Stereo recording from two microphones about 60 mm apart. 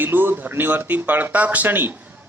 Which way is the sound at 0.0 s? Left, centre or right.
Right.